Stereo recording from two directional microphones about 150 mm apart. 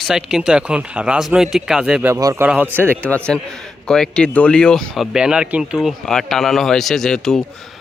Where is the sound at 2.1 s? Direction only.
20° right (ahead or behind).